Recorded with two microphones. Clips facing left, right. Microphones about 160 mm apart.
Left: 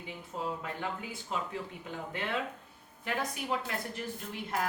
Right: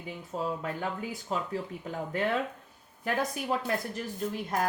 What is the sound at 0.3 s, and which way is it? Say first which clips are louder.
Speech: right 4 dB; 35° right (ahead or behind).